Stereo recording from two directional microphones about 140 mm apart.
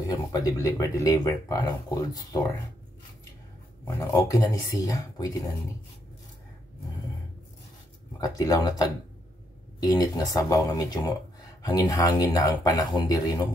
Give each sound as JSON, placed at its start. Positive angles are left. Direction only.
{"t": 0.0, "sound": "speech", "side_deg": 25}
{"t": 3.8, "sound": "speech", "side_deg": 20}
{"t": 8.2, "sound": "speech", "side_deg": 25}